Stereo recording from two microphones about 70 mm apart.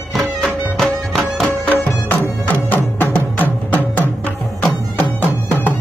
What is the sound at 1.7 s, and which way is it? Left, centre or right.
Music, left.